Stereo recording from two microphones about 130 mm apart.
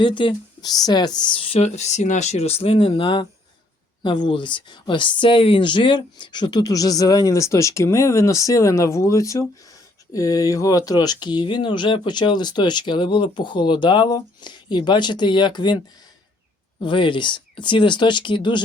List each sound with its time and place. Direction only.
0.0 s speech: 40° left (ahead or behind)
16.8 s speech: 40° left (ahead or behind)